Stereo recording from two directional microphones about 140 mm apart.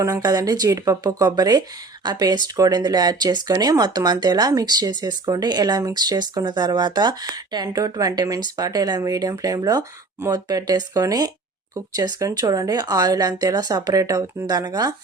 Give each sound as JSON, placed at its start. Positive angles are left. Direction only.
{"t": 0.0, "sound": "speech", "side_deg": -25}